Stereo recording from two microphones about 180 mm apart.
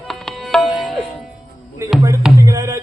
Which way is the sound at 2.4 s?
15° right (ahead or behind).